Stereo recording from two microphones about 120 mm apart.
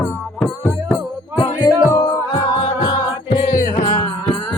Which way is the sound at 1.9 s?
35° left (ahead or behind).